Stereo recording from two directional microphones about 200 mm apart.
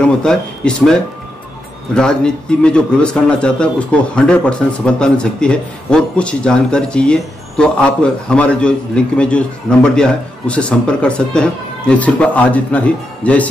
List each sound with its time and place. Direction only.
0.0 s a man's voice: 5° left (ahead or behind)
2.0 s a man's voice: 5° left (ahead or behind)